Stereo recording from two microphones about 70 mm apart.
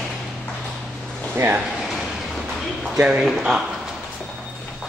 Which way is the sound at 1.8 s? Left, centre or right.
Centre.